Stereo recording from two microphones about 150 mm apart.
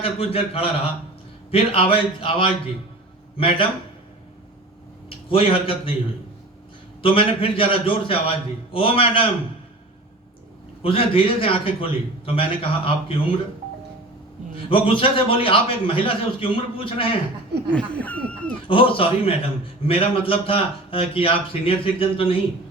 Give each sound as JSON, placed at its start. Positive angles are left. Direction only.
{"t": 0.0, "sound": "a man's voice", "side_deg": 40}
{"t": 5.0, "sound": "a man's voice", "side_deg": 35}
{"t": 7.0, "sound": "a man's voice", "side_deg": 40}
{"t": 10.8, "sound": "a man's voice", "side_deg": 35}
{"t": 14.5, "sound": "a man's voice", "side_deg": 35}
{"t": 17.5, "sound": "a sound", "side_deg": -90}
{"t": 18.0, "sound": "speech", "side_deg": 10}
{"t": 18.7, "sound": "a man's voice", "side_deg": 35}